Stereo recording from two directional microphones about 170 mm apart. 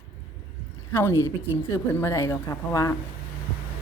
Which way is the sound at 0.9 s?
15° left (ahead or behind).